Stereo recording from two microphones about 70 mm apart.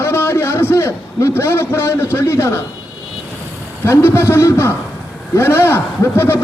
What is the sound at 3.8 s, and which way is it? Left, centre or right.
A man's voice, left.